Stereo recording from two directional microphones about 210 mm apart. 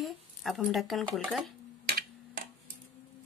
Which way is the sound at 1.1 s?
Centre (ahead or behind).